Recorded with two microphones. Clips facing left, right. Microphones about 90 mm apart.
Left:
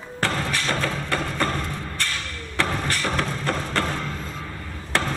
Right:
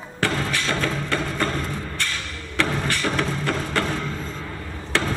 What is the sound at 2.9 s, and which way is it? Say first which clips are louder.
Music: right 1 dB; 20° right (ahead or behind).